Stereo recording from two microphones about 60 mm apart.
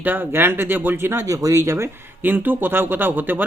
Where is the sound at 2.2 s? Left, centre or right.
Right.